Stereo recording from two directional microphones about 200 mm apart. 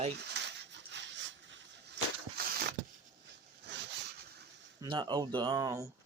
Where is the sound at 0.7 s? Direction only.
60° right (ahead or behind).